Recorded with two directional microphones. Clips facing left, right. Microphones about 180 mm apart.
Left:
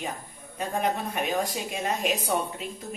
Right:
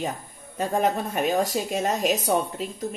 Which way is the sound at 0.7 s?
40° right (ahead or behind).